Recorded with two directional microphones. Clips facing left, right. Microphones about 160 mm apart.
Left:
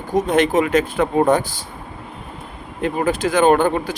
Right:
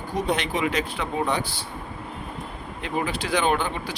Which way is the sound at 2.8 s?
45° left (ahead or behind).